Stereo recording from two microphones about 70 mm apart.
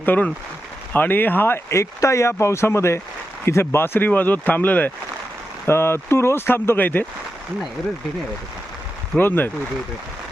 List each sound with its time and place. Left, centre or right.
0.0 s speech: left
1.8 s speech: left
5.6 s speech: left
9.1 s speech: left